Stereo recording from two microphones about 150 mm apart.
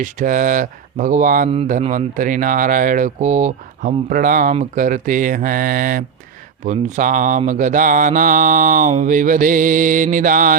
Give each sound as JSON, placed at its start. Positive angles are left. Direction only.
{"t": 0.0, "sound": "mantra", "side_deg": -60}